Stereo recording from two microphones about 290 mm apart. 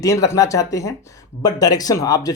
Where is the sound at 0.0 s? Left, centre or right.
Centre.